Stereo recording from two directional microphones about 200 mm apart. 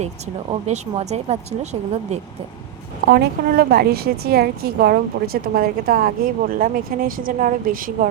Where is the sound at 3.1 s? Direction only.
55° right (ahead or behind).